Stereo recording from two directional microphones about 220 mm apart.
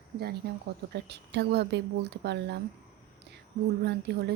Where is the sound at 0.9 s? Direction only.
50° right (ahead or behind).